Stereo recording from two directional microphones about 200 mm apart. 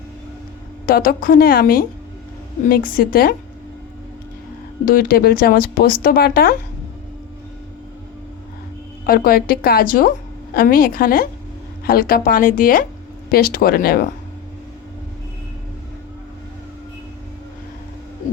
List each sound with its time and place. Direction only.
0.9 s speech: 45° left (ahead or behind)
4.9 s speech: 45° left (ahead or behind)
9.0 s speech: 45° left (ahead or behind)